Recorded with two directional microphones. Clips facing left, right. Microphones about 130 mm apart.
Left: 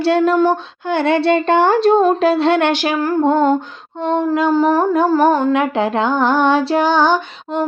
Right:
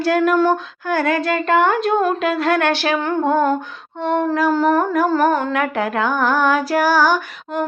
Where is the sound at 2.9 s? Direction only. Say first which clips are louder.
Left 3 dB; 5° left (ahead or behind).